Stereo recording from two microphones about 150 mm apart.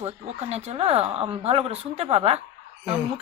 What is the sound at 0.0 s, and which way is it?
Speech, 45° right (ahead or behind).